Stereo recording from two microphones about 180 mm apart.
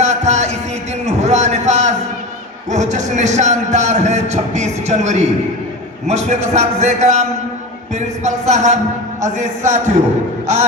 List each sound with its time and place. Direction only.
0.0 s music: 40° right (ahead or behind)
1.0 s a sound: 40° right (ahead or behind)
2.6 s speech: 40° right (ahead or behind)
10.4 s music: 40° right (ahead or behind)